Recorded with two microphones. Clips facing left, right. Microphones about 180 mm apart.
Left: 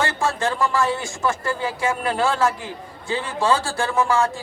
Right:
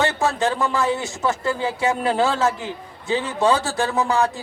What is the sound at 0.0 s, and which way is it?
A man's voice, 20° right (ahead or behind).